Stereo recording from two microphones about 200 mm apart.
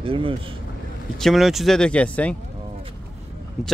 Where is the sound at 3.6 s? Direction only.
Centre (ahead or behind).